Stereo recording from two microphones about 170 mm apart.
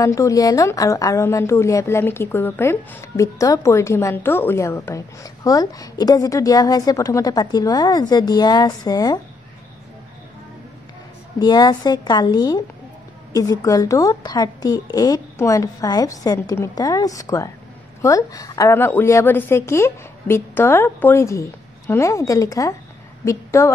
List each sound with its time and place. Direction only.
0.0 s speech: 20° left (ahead or behind)
11.3 s a woman's voice: 25° left (ahead or behind)